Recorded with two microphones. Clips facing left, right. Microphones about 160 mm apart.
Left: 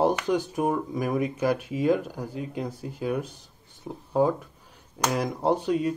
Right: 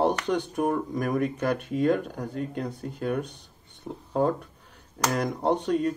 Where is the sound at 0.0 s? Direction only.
5° left (ahead or behind).